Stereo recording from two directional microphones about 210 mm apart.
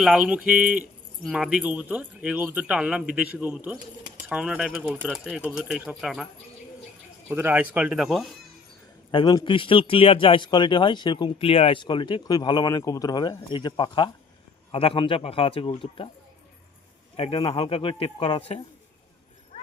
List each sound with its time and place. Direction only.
0.0 s speech: 5° right (ahead or behind)
7.3 s speech: 10° right (ahead or behind)
9.1 s speech: 20° left (ahead or behind)
17.2 s speech: 25° left (ahead or behind)